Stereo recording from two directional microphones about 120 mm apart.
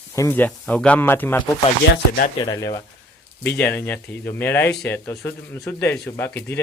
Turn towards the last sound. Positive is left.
turn(degrees=20)  # may be behind; listen again after turning